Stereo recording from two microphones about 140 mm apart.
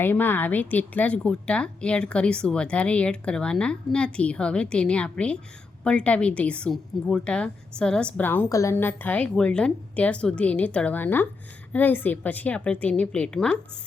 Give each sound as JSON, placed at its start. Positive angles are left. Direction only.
{"t": 0.0, "sound": "a woman's voice", "side_deg": 15}